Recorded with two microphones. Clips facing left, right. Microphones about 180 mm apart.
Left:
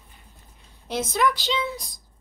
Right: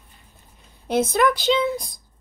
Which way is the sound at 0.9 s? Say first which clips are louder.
Right 5 dB; 55° right (ahead or behind).